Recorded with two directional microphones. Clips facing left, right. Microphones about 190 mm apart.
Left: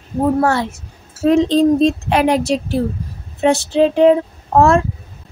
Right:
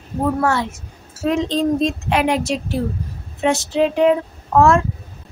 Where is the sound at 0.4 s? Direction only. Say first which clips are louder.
Left 3 dB; 35° left (ahead or behind).